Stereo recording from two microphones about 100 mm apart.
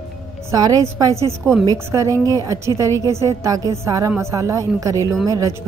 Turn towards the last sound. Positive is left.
turn(degrees=-35)  # may be behind; listen again after turning